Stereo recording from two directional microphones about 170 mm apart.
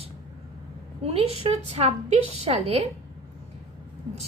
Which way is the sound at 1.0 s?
35° right (ahead or behind).